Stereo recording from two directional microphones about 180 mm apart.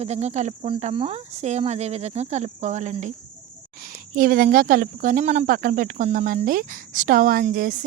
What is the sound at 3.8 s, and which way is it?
Speech, 50° right (ahead or behind).